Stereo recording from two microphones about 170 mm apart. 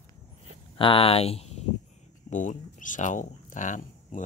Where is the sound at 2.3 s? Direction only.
50° left (ahead or behind).